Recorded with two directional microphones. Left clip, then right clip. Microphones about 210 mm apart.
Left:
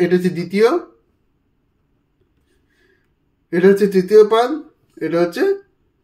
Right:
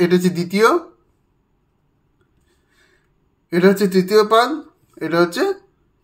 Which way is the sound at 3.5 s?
30° right (ahead or behind).